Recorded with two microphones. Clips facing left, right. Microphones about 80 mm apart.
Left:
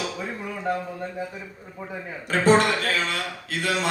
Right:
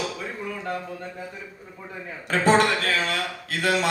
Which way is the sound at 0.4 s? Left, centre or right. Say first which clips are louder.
Left 4 dB; centre.